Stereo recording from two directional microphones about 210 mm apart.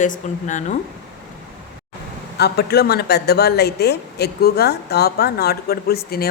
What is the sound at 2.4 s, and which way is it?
A woman's voice, 50° left (ahead or behind).